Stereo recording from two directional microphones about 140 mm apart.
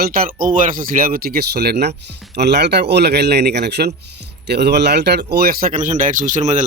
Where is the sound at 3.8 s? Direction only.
90° right.